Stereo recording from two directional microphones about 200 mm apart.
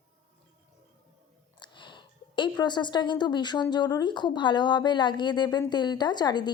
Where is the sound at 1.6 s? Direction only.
25° left (ahead or behind).